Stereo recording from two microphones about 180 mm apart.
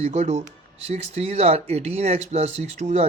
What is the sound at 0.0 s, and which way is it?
Speech, 35° right (ahead or behind).